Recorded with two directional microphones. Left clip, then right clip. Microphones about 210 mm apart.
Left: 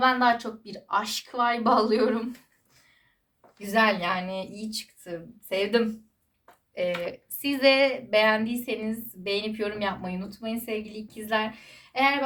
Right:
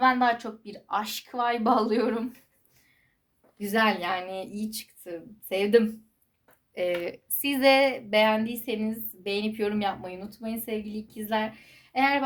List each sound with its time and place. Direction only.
0.0 s speech: 35° right (ahead or behind)
3.6 s speech: 55° right (ahead or behind)
11.3 s a woman's voice: centre (ahead or behind)
11.9 s speech: 40° right (ahead or behind)